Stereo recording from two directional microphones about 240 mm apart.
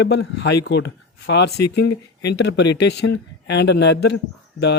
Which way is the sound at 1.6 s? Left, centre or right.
Left.